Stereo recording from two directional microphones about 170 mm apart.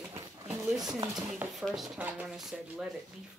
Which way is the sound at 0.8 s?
20° right (ahead or behind).